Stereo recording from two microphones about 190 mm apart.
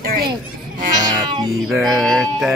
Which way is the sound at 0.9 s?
20° right (ahead or behind).